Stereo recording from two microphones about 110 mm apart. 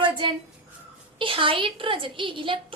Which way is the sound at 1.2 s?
50° right (ahead or behind).